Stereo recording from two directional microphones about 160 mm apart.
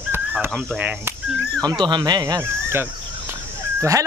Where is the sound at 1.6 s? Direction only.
25° right (ahead or behind).